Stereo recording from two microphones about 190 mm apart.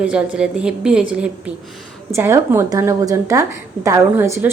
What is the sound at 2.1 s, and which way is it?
A woman's voice, 15° right (ahead or behind).